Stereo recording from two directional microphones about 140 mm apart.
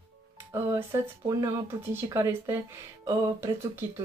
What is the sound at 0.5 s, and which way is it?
Speech, 15° right (ahead or behind).